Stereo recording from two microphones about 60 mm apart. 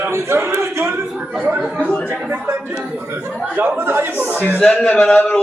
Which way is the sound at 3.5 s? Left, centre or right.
Right.